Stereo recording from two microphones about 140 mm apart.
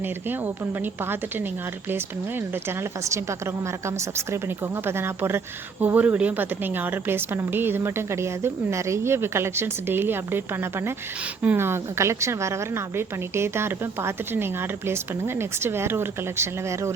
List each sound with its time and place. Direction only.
0.0 s a woman's voice: 15° right (ahead or behind)